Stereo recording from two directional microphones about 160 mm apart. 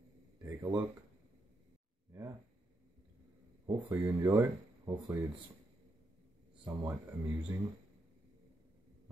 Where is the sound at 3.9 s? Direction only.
15° right (ahead or behind).